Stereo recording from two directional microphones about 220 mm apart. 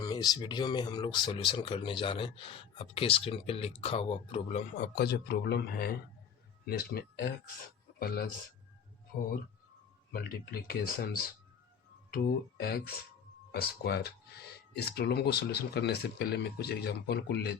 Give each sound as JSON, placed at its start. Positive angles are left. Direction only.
{"t": 0.0, "sound": "speech", "side_deg": 20}
{"t": 4.8, "sound": "speech", "side_deg": 45}
{"t": 10.1, "sound": "speech", "side_deg": 45}
{"t": 12.1, "sound": "speech", "side_deg": 45}